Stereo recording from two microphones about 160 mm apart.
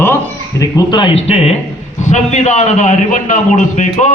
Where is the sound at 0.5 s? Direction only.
25° left (ahead or behind).